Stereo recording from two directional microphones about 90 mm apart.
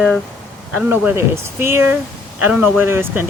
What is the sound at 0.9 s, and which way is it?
Speech, 25° right (ahead or behind).